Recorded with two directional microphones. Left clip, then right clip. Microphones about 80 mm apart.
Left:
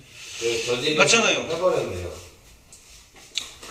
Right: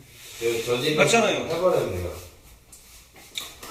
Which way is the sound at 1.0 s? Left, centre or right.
Left.